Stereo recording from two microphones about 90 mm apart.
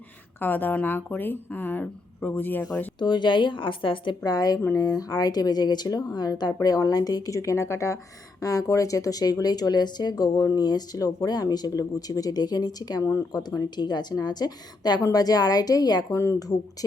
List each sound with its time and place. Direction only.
0.3 s speech: 20° left (ahead or behind)
3.0 s a woman's voice: 55° left (ahead or behind)
4.2 s speech: 45° left (ahead or behind)
16.1 s speech: 35° left (ahead or behind)